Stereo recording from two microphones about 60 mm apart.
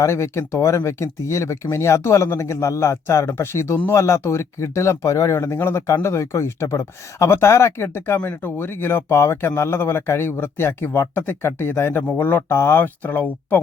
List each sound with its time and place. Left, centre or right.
0.0 s speech: left
7.3 s a man's voice: left